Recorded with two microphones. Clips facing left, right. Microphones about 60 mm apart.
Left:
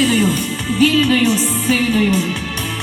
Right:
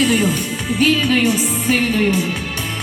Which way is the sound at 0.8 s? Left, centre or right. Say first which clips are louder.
Left 2 dB; right.